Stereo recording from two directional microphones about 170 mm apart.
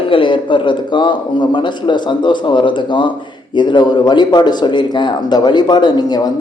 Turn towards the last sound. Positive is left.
turn(degrees=25)  # may be behind; listen again after turning